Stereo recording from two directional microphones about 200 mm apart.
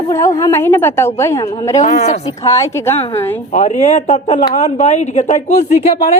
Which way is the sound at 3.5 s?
35° left (ahead or behind).